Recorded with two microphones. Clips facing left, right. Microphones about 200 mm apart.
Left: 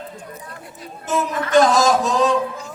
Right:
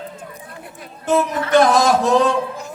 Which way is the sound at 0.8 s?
60° right (ahead or behind).